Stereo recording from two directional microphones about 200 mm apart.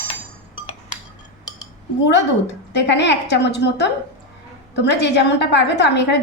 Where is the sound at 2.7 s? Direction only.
60° left (ahead or behind).